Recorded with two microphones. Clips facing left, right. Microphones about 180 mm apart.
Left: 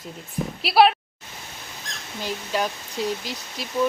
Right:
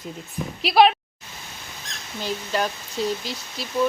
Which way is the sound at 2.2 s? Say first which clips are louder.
Right 1 dB; 10° left (ahead or behind).